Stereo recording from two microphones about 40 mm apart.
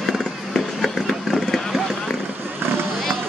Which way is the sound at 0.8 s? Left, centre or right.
Centre.